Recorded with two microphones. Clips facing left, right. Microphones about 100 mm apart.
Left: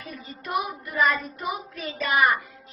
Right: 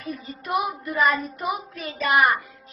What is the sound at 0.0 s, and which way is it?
Speech, 35° right (ahead or behind).